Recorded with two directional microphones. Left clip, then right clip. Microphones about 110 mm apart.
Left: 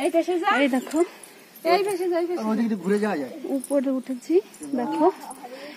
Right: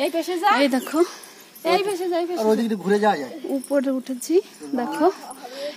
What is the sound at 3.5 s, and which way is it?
Speech, 20° right (ahead or behind).